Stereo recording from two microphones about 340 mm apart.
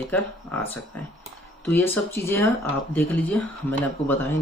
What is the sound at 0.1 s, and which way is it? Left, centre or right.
Speech, centre.